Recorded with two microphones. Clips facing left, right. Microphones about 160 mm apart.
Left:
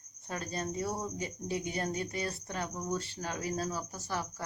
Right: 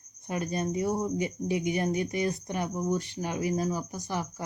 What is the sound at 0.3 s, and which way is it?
Cricket, 15° right (ahead or behind).